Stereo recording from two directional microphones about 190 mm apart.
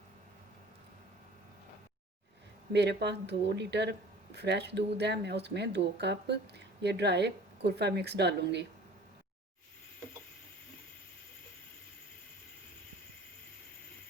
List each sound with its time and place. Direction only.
2.7 s speech: 60° right (ahead or behind)